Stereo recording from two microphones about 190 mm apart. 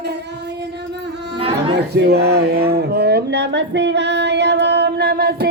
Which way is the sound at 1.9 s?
60° right (ahead or behind).